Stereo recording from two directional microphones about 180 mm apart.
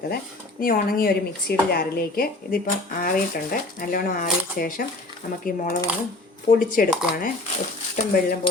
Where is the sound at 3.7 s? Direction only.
50° left (ahead or behind).